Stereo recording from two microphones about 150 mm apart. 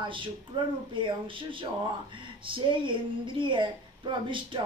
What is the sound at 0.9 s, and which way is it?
Speech, 35° right (ahead or behind).